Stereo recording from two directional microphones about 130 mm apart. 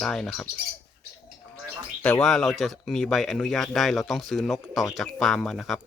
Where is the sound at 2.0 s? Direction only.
5° left (ahead or behind).